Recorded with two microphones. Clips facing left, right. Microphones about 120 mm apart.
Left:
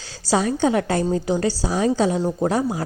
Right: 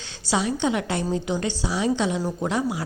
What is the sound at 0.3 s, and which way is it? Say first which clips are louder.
A woman's voice: left 4 dB; 40° left (ahead or behind).